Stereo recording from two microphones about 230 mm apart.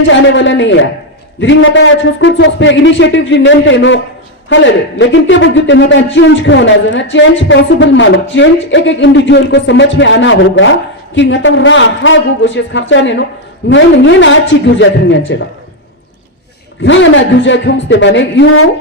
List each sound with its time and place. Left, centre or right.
0.1 s a man's voice: left
16.8 s a man's voice: left